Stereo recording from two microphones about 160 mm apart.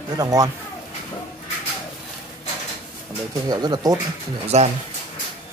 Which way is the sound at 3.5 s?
25° right (ahead or behind).